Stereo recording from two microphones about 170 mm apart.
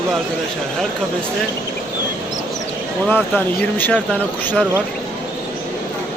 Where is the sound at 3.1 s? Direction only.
10° left (ahead or behind).